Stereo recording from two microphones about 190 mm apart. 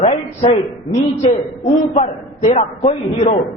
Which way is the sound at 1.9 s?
40° left (ahead or behind).